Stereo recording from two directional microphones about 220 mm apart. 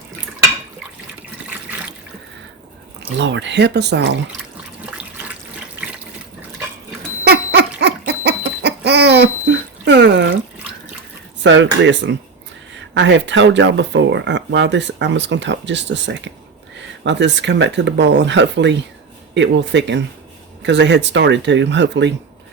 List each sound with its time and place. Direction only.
3.2 s speech: 55° right (ahead or behind)
7.3 s a sound: 50° right (ahead or behind)
11.4 s speech: 55° right (ahead or behind)